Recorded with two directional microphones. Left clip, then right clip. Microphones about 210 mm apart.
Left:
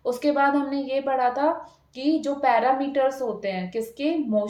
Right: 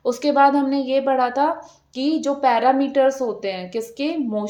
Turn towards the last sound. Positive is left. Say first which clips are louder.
# even
turn(degrees=-35)  # may be behind; listen again after turning